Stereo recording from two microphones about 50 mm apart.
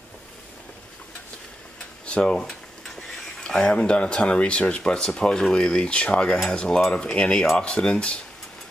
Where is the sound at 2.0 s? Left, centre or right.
Centre.